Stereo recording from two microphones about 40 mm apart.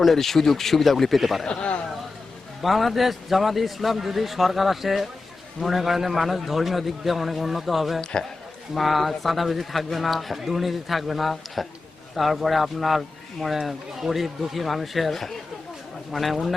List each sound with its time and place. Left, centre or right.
0.0 s speech: centre
1.5 s a man's voice: left
2.6 s speech: centre